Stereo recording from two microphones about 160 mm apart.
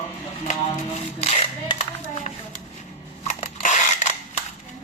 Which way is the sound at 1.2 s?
35° left (ahead or behind).